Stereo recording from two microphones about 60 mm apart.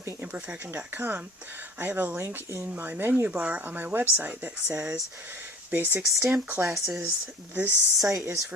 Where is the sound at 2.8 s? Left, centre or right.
Right.